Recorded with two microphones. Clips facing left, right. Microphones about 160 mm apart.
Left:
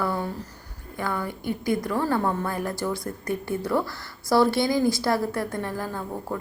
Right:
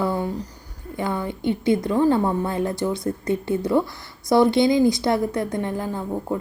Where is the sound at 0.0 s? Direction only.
20° right (ahead or behind).